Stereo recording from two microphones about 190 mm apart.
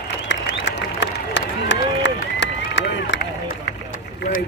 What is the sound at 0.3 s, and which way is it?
Applause, 70° left (ahead or behind).